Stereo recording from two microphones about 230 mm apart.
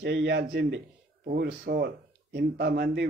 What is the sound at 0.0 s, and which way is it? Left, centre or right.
A man's voice, right.